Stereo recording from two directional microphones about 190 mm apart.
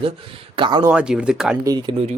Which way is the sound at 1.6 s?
20° right (ahead or behind).